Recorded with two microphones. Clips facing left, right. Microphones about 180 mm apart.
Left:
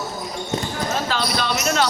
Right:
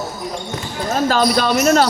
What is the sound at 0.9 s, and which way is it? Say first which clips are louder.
Speech: right 10 dB; 45° right (ahead or behind).